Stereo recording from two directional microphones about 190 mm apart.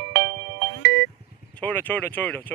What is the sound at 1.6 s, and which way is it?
Speech, 10° left (ahead or behind).